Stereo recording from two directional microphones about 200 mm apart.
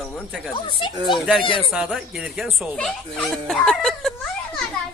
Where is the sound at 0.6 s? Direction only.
25° left (ahead or behind).